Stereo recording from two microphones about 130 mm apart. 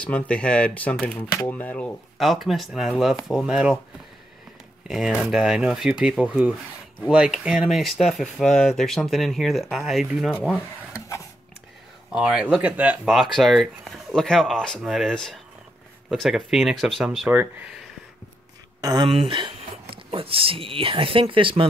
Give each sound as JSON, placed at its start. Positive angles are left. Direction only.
{"t": 0.0, "sound": "speech", "side_deg": 10}
{"t": 2.1, "sound": "speech", "side_deg": 0}
{"t": 4.8, "sound": "speech", "side_deg": -5}
{"t": 12.1, "sound": "speech", "side_deg": -5}
{"t": 18.8, "sound": "speech", "side_deg": -30}
{"t": 19.0, "sound": "speech", "side_deg": -45}